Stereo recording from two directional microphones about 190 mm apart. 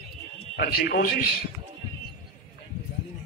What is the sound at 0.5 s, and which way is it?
Speech, 55° left (ahead or behind).